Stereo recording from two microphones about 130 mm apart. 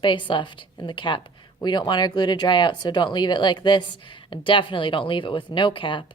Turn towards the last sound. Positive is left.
turn(degrees=40)  # may be behind; listen again after turning